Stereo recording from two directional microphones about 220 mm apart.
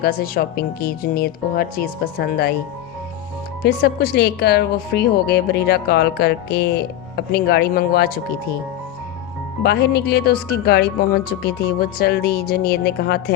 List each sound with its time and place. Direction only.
0.0 s a woman's voice: 45° left (ahead or behind)
3.6 s a woman's voice: 45° left (ahead or behind)
9.6 s a woman's voice: 45° left (ahead or behind)